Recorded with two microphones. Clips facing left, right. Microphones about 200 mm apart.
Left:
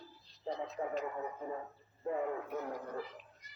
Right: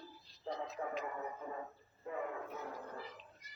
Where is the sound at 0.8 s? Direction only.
20° left (ahead or behind).